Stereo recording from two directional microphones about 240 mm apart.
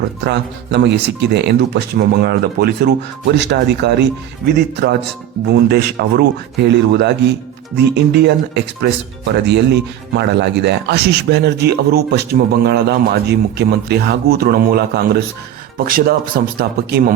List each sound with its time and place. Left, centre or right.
0.2 s speech: right